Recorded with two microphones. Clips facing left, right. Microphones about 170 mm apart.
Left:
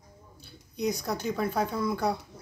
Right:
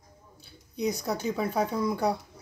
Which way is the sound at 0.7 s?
5° right (ahead or behind).